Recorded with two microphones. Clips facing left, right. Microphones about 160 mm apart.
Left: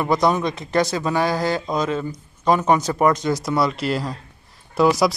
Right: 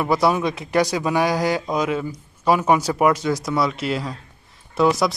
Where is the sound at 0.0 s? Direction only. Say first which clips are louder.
Even; 5° right (ahead or behind).